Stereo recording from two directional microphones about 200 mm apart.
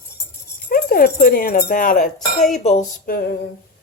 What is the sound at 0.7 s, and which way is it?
Speech, 45° left (ahead or behind).